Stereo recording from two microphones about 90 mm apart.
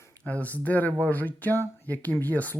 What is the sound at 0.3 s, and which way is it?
Speech, 15° left (ahead or behind).